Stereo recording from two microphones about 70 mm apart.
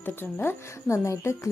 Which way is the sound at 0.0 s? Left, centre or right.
Left.